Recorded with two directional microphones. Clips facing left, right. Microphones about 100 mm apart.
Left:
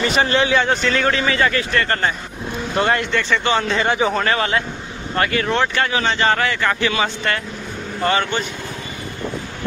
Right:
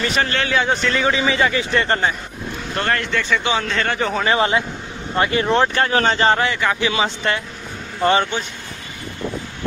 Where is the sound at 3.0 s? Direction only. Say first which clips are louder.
Left 1 dB; centre (ahead or behind).